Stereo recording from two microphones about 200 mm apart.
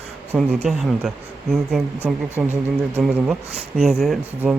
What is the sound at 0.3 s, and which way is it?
Speech, centre (ahead or behind).